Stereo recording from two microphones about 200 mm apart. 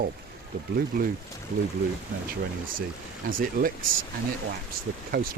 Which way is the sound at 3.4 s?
45° right (ahead or behind).